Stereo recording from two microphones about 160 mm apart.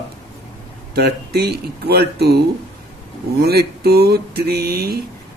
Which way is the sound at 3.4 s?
80° right.